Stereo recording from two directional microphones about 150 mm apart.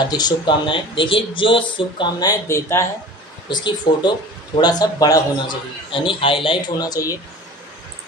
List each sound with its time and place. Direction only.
0.1 s speech: 30° left (ahead or behind)
3.4 s a man's voice: 30° left (ahead or behind)